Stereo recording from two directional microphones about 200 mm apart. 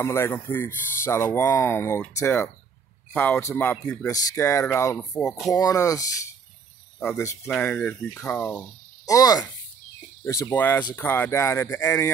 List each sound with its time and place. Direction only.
0.0 s speech: 10° left (ahead or behind)